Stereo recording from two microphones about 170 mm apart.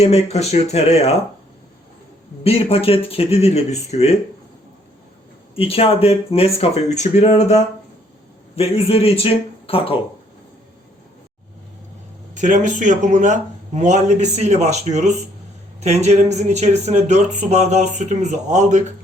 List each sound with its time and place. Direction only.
0.0 s speech: 40° left (ahead or behind)
2.4 s speech: 35° left (ahead or behind)
5.5 s speech: 35° left (ahead or behind)
12.3 s speech: 50° right (ahead or behind)